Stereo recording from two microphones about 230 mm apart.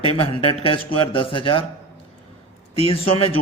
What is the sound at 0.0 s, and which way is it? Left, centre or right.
Speech, left.